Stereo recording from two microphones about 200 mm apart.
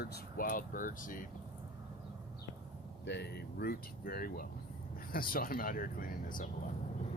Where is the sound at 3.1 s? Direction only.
55° left (ahead or behind).